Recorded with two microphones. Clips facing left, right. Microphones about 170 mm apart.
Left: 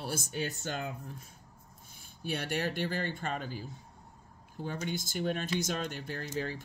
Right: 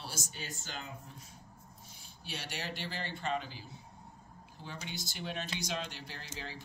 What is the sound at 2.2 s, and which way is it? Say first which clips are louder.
Speech: left 9 dB; 55° left (ahead or behind).